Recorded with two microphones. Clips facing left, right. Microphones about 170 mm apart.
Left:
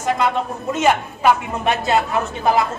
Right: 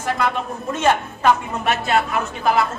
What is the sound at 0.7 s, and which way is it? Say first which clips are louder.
Speech: left 1 dB; 10° left (ahead or behind).